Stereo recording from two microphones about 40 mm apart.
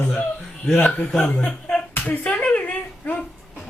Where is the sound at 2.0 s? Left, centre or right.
Left.